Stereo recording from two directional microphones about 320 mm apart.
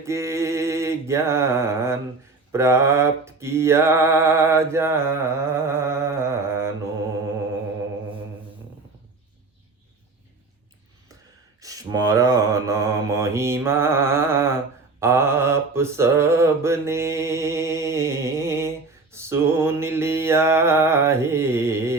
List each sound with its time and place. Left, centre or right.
0.0 s mantra: centre
11.6 s mantra: centre